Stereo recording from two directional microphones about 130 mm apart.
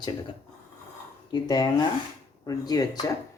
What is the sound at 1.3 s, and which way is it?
Speech, 35° left (ahead or behind).